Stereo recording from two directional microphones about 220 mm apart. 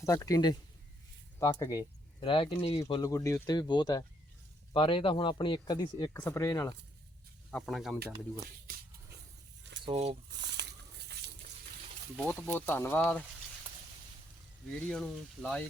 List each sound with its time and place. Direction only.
0.0 s speech: 15° left (ahead or behind)
2.8 s speech: 15° left (ahead or behind)
7.5 s speech: centre (ahead or behind)
9.8 s speech: 30° right (ahead or behind)
10.3 s a sound: 50° right (ahead or behind)
12.3 s speech: 5° left (ahead or behind)
14.8 s speech: 5° left (ahead or behind)